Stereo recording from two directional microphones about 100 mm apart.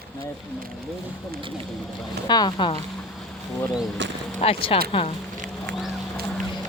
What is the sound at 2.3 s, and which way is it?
Speech, 45° left (ahead or behind).